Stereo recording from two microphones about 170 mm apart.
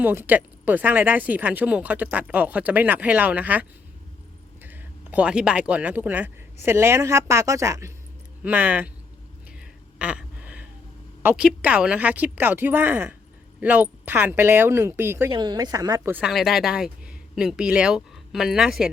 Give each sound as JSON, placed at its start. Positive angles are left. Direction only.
{"t": 0.0, "sound": "speech", "side_deg": -10}
{"t": 10.0, "sound": "a sound", "side_deg": -5}
{"t": 11.2, "sound": "speech", "side_deg": -10}
{"t": 15.3, "sound": "a woman's voice", "side_deg": -25}
{"t": 16.1, "sound": "speech", "side_deg": 0}